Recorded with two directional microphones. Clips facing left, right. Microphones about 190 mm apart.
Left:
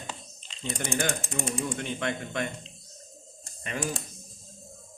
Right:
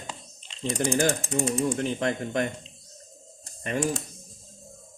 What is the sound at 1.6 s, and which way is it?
Speech, 35° right (ahead or behind).